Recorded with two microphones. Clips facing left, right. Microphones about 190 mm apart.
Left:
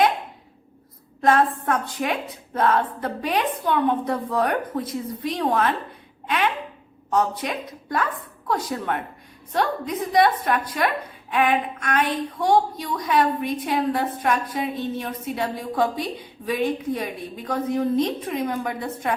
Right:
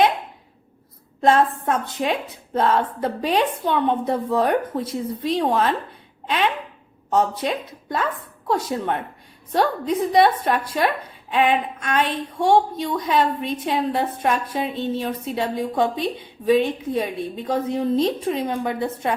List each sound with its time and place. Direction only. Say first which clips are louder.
1.2 s a woman's voice: right 2 dB; 25° right (ahead or behind)
6.2 s a sound: right 1 dB; 30° right (ahead or behind)
7.1 s a woman's voice: right 2 dB; 25° right (ahead or behind)